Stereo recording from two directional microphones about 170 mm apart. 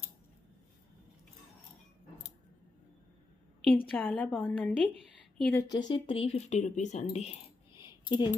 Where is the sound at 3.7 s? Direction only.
10° left (ahead or behind); by 7.3 s 40° left (ahead or behind).